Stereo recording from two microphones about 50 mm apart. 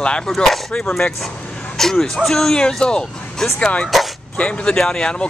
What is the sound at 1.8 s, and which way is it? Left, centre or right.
Speech, centre.